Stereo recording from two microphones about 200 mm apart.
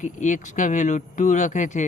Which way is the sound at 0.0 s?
40° left (ahead or behind).